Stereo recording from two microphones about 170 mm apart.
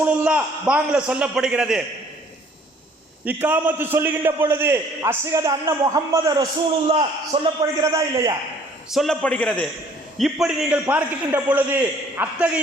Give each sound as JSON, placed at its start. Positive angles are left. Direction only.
{"t": 0.0, "sound": "a man's voice", "side_deg": -10}
{"t": 3.2, "sound": "a man's voice", "side_deg": -10}
{"t": 6.8, "sound": "a man's voice", "side_deg": -35}
{"t": 7.6, "sound": "a man's voice", "side_deg": -20}
{"t": 8.9, "sound": "a man's voice", "side_deg": 0}
{"t": 10.4, "sound": "a man's voice", "side_deg": -5}